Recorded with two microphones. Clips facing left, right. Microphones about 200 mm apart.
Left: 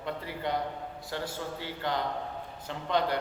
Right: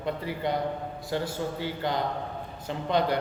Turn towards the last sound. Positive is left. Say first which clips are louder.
# right 3 dB
turn(degrees=-15)  # may be behind; listen again after turning